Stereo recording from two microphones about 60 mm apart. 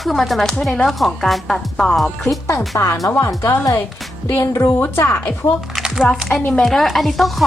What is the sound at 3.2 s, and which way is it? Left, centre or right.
Speech, left.